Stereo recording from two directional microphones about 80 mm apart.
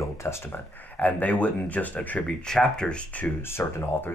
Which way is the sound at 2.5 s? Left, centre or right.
Centre.